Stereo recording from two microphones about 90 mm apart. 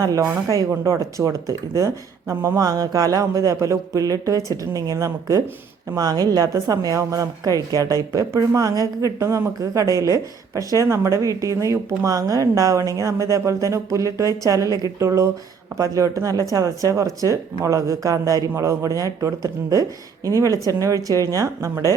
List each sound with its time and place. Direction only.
0.0 s a woman's voice: 40° right (ahead or behind)